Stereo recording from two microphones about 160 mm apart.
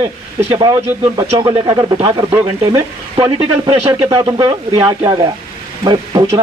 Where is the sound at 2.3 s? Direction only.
15° right (ahead or behind).